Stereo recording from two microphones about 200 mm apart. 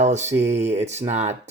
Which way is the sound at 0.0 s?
35° right (ahead or behind).